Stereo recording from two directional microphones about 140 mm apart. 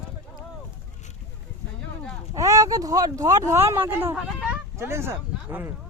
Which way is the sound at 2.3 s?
25° right (ahead or behind).